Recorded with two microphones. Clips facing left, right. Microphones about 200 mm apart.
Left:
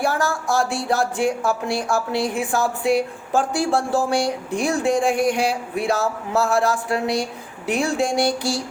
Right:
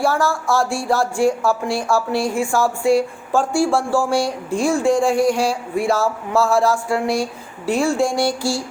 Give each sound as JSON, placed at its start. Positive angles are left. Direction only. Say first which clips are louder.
{"t": 0.0, "sound": "a woman's voice", "louder": "right 3 dB", "side_deg": 20}